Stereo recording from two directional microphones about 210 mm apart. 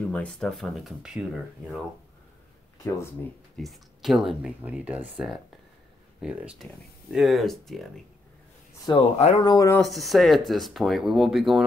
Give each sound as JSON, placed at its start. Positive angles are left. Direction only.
{"t": 0.1, "sound": "speech", "side_deg": 5}
{"t": 3.5, "sound": "speech", "side_deg": 0}
{"t": 8.9, "sound": "speech", "side_deg": 20}
{"t": 9.8, "sound": "speech", "side_deg": 0}